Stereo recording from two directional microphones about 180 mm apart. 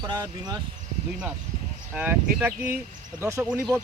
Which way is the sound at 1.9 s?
10° right (ahead or behind).